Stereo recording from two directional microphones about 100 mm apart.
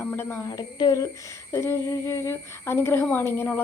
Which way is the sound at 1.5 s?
30° left (ahead or behind).